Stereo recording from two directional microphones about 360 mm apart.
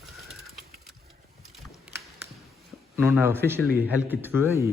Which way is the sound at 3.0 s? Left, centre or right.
Centre.